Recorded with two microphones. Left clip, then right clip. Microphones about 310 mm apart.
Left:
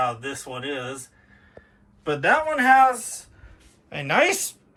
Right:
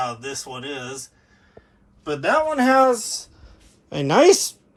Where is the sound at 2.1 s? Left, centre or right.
Centre.